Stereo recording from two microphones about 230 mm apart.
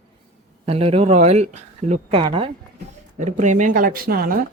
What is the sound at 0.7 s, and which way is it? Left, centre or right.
Speech, right.